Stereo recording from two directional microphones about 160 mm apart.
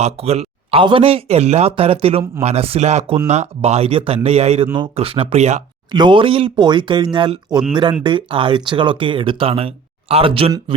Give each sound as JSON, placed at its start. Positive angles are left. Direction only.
{"t": 0.0, "sound": "speech", "side_deg": -40}
{"t": 5.9, "sound": "speech", "side_deg": -30}